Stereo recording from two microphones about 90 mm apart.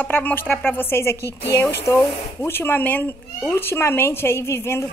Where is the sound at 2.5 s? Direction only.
25° left (ahead or behind).